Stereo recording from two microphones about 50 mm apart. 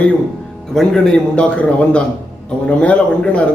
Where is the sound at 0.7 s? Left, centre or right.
Centre.